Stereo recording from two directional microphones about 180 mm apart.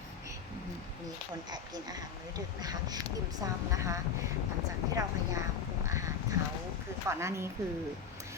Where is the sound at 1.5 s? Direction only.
20° right (ahead or behind).